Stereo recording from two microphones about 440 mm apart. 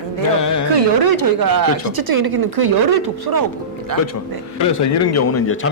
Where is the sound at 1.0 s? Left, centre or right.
Right.